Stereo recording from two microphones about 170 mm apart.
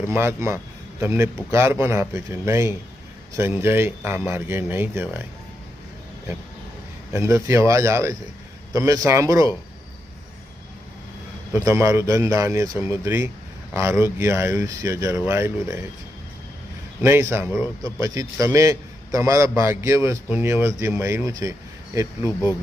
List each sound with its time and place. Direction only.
0.1 s a man's voice: 15° right (ahead or behind)
7.1 s a man's voice: 15° right (ahead or behind)
11.5 s a man's voice: 15° right (ahead or behind)
17.0 s a man's voice: 15° right (ahead or behind)